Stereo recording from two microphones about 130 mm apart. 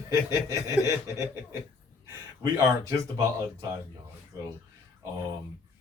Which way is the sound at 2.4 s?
25° right (ahead or behind).